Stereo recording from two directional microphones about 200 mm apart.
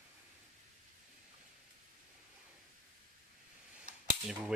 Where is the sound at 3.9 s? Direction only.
40° right (ahead or behind).